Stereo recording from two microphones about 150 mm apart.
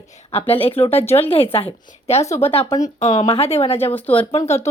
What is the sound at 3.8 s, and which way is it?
Speech, 10° left (ahead or behind).